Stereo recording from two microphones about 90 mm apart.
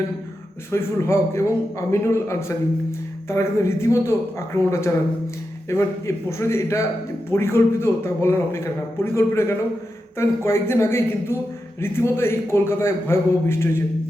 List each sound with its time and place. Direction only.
0.7 s a man's voice: 30° left (ahead or behind)